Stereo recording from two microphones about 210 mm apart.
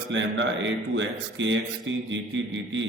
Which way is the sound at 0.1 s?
60° right (ahead or behind).